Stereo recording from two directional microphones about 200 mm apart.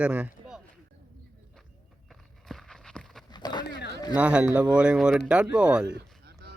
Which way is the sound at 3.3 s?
20° left (ahead or behind).